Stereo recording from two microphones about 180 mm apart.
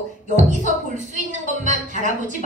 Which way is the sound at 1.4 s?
45° right (ahead or behind).